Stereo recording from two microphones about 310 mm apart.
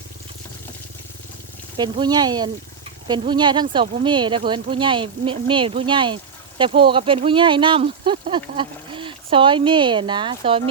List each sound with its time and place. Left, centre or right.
1.7 s speech: centre